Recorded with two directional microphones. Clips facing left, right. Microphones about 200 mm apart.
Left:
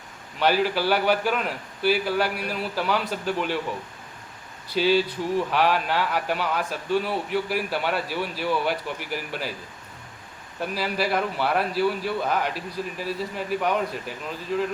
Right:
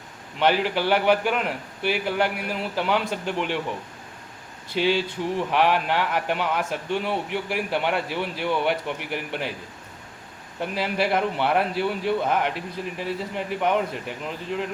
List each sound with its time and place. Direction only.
0.3 s a man's voice: 20° right (ahead or behind)
4.7 s a man's voice: 20° right (ahead or behind)
10.6 s a man's voice: 20° right (ahead or behind)